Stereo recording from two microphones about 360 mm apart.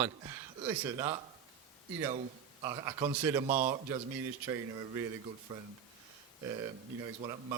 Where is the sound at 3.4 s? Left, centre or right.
Right.